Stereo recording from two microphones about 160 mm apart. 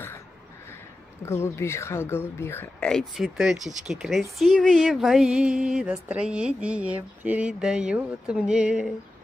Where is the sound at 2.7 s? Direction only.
5° left (ahead or behind).